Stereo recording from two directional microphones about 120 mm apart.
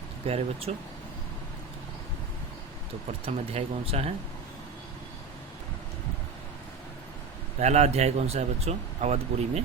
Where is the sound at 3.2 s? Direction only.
60° right (ahead or behind).